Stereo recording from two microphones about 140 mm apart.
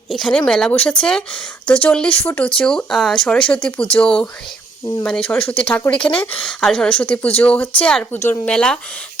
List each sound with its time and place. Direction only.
0.2 s speech: 5° left (ahead or behind)
2.6 s speech: 5° left (ahead or behind)
5.3 s speech: 5° left (ahead or behind)